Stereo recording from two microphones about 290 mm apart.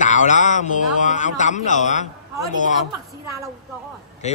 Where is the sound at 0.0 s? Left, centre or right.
Left.